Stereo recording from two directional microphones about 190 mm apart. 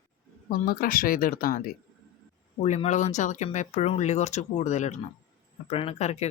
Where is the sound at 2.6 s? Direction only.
35° left (ahead or behind).